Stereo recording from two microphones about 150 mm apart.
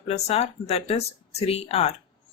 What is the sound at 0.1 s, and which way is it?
A woman's voice, 45° left (ahead or behind).